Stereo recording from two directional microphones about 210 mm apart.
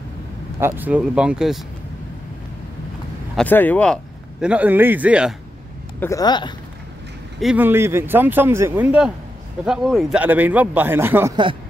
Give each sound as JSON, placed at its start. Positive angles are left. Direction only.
{"t": 0.6, "sound": "speech", "side_deg": -10}
{"t": 3.3, "sound": "speech", "side_deg": 10}
{"t": 5.9, "sound": "speech", "side_deg": 15}
{"t": 7.3, "sound": "speech", "side_deg": -5}